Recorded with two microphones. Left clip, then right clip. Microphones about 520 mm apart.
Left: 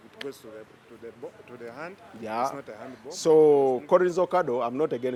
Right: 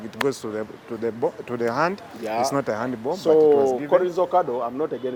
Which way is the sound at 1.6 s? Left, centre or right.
Right.